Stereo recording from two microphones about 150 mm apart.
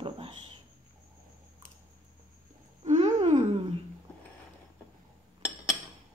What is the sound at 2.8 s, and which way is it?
Wail, 50° right (ahead or behind).